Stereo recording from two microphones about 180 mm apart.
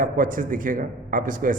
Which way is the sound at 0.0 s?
50° right (ahead or behind).